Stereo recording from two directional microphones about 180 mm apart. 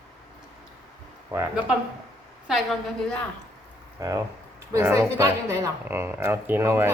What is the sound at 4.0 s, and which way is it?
Speech, 20° right (ahead or behind).